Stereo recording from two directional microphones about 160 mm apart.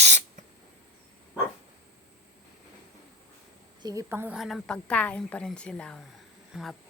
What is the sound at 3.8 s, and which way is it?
Speech, 20° right (ahead or behind).